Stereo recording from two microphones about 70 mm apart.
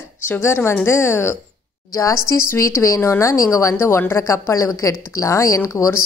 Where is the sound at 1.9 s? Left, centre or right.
Left.